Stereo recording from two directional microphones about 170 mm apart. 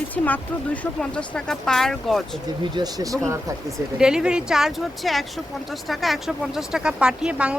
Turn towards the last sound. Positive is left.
turn(degrees=-5)  # may be behind; listen again after turning